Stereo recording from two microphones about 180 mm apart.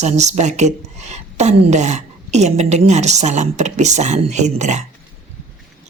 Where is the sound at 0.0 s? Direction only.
40° right (ahead or behind).